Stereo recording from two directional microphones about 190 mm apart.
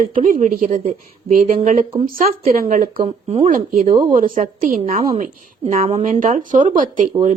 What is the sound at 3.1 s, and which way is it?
Speech, 30° right (ahead or behind).